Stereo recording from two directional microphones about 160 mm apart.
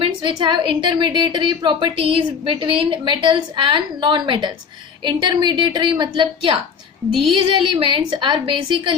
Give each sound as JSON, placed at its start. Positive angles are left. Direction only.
{"t": 0.0, "sound": "a woman's voice", "side_deg": -30}